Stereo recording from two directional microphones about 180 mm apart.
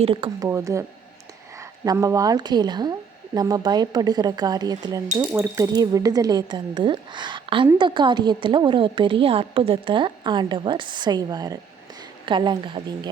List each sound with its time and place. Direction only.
0.0 s a woman's voice: 30° right (ahead or behind)
0.4 s a woman's voice: 15° right (ahead or behind)